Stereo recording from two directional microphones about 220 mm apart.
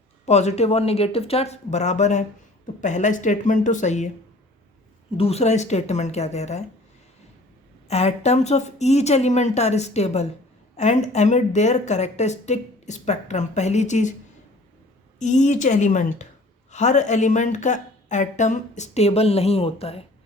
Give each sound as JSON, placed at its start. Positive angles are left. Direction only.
{"t": 0.3, "sound": "a woman's voice", "side_deg": 30}
{"t": 5.1, "sound": "speech", "side_deg": 25}
{"t": 7.9, "sound": "a woman's voice", "side_deg": 30}
{"t": 15.2, "sound": "speech", "side_deg": 35}